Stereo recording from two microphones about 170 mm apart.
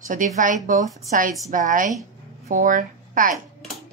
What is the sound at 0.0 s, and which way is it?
A woman's voice, 50° right (ahead or behind).